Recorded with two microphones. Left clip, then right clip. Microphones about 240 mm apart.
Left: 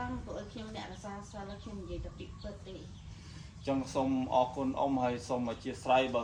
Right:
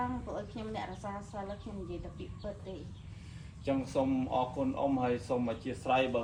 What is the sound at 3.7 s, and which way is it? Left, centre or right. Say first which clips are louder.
Speech: right 1 dB; centre.